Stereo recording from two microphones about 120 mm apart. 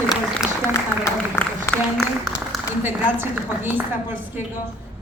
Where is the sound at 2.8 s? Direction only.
20° right (ahead or behind).